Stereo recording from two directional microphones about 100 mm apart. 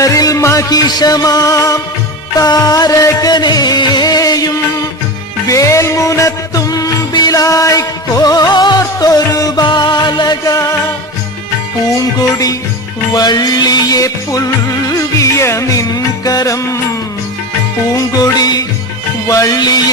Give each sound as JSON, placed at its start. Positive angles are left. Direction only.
{"t": 0.0, "sound": "music", "side_deg": 35}
{"t": 11.9, "sound": "music", "side_deg": 35}
{"t": 17.9, "sound": "music", "side_deg": 40}